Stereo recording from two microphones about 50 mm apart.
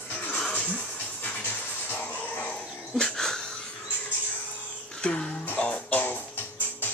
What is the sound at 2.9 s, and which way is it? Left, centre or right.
Wheeze, centre.